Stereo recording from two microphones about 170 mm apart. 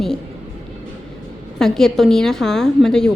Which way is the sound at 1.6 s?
Centre (ahead or behind).